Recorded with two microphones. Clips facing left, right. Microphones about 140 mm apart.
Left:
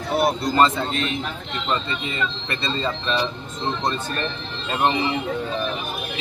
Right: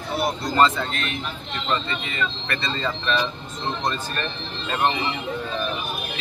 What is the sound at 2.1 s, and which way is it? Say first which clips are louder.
Speech: even; 25° left (ahead or behind).